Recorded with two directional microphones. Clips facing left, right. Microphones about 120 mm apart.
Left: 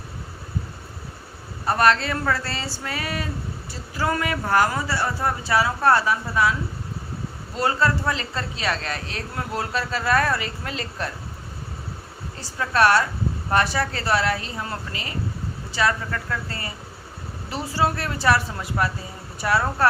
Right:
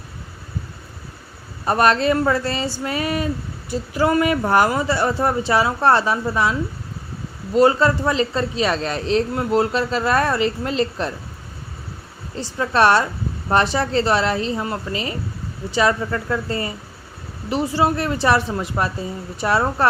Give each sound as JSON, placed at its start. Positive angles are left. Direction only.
{"t": 1.6, "sound": "speech", "side_deg": -20}
{"t": 12.4, "sound": "speech", "side_deg": -25}